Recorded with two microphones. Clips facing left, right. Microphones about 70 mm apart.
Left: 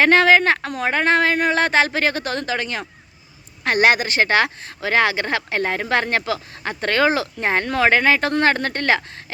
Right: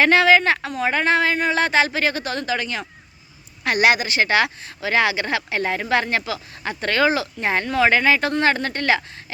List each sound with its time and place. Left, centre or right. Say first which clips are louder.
0.0 s speech: left 1 dB; left